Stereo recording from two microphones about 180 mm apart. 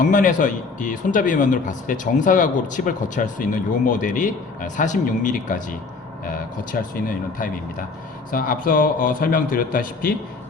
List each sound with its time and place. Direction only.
0.0 s speech: 45° left (ahead or behind)